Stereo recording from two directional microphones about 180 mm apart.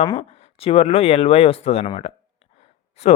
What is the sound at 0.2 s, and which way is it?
Speech, 35° left (ahead or behind).